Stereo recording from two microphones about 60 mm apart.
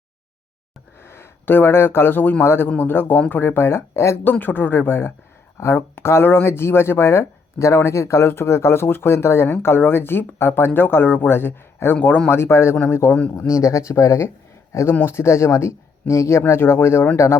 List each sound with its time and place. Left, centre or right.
0.9 s speech: left
4.2 s speech: left
11.9 s speech: left
12.3 s speech: left
13.5 s speech: left
16.5 s speech: left